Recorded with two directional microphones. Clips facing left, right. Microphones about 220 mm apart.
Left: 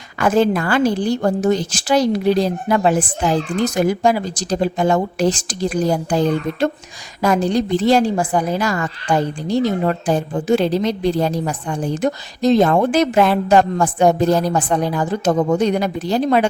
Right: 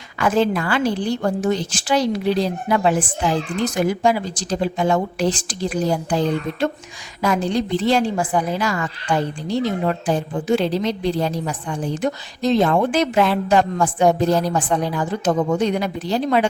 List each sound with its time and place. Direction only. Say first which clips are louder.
0.2 s a woman's voice: left 3 dB; 45° left (ahead or behind)